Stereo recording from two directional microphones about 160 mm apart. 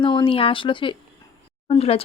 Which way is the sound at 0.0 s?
30° left (ahead or behind).